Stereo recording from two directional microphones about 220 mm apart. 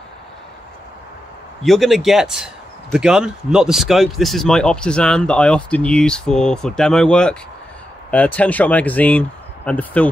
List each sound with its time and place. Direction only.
1.6 s speech: centre (ahead or behind)